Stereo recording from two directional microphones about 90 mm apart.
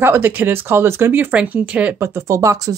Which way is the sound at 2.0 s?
30° right (ahead or behind).